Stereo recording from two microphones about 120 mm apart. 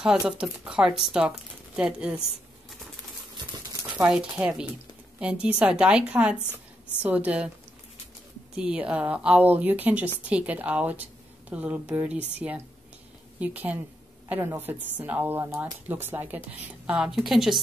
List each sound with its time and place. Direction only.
0.0 s speech: 5° right (ahead or behind)
4.1 s speech: 10° right (ahead or behind)
8.5 s a woman's voice: 10° right (ahead or behind)